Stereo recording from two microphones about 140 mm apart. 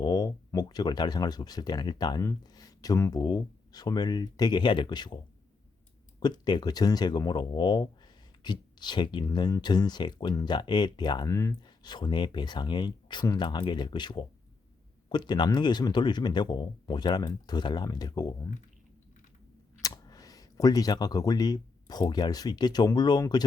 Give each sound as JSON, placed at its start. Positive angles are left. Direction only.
{"t": 0.0, "sound": "speech", "side_deg": 30}
{"t": 19.8, "sound": "speech", "side_deg": 25}